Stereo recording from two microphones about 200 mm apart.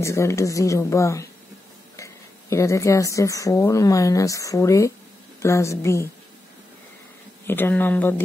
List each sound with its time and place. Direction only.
0.0 s a woman's voice: 15° left (ahead or behind)
7.4 s a woman's voice: 10° left (ahead or behind)